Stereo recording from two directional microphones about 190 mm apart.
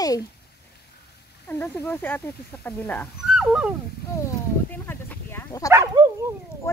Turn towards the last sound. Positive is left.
turn(degrees=15)  # may be behind; listen again after turning